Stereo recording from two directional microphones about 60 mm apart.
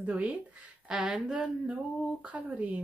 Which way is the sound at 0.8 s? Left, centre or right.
Centre.